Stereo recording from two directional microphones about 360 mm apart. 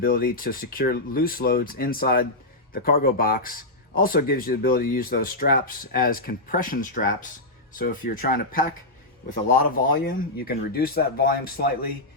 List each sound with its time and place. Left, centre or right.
0.0 s speech: left